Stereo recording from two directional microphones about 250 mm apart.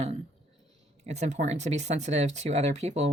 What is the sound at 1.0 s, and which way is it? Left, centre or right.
Speech, right.